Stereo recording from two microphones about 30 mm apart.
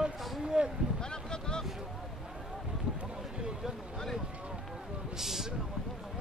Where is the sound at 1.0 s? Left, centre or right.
Left.